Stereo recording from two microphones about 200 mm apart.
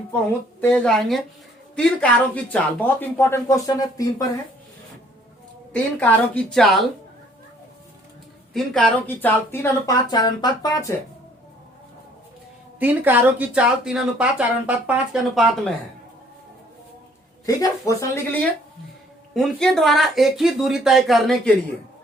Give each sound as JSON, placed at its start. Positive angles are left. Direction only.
{"t": 0.6, "sound": "speech", "side_deg": 5}
{"t": 5.7, "sound": "speech", "side_deg": 5}
{"t": 8.5, "sound": "speech", "side_deg": 5}
{"t": 12.8, "sound": "speech", "side_deg": -10}
{"t": 17.4, "sound": "speech", "side_deg": 15}
{"t": 19.3, "sound": "speech", "side_deg": 0}